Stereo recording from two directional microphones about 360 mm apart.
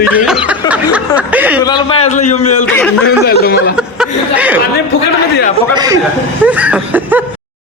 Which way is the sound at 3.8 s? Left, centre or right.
Centre.